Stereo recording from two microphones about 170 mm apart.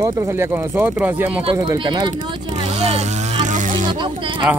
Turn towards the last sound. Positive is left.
turn(degrees=-30)  # may be behind; listen again after turning